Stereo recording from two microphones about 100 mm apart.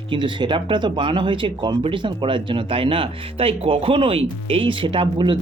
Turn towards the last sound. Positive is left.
turn(degrees=-55)  # may be behind; listen again after turning